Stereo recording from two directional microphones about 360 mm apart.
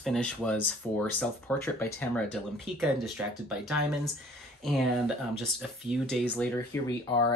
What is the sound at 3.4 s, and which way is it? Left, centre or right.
Speech, centre.